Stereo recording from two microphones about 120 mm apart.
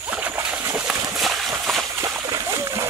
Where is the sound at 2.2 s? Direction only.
25° right (ahead or behind).